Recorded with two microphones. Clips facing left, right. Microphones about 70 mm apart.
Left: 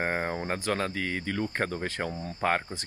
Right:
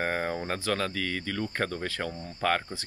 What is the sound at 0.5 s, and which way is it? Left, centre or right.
Speech, left.